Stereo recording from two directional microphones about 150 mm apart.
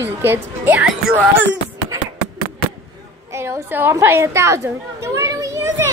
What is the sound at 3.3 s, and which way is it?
A woman's voice, 15° right (ahead or behind).